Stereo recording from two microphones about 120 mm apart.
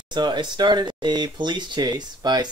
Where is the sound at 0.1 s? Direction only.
40° right (ahead or behind).